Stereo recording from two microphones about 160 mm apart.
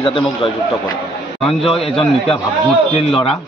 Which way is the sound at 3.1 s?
5° left (ahead or behind).